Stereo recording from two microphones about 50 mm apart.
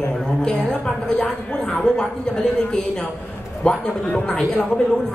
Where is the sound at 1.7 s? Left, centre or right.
Centre.